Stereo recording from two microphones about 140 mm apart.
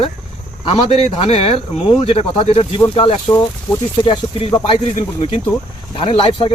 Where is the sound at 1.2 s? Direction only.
45° left (ahead or behind).